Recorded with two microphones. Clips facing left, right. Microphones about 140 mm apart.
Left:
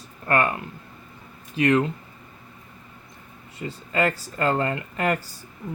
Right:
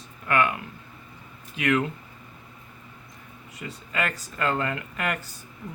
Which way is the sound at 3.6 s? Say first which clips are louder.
Left 6 dB; 30° left (ahead or behind).